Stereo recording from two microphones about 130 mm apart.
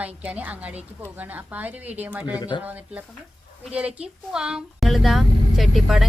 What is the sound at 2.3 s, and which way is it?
Speech, 30° left (ahead or behind).